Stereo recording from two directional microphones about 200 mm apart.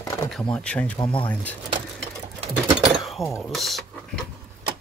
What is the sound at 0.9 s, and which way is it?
Speech, 20° left (ahead or behind).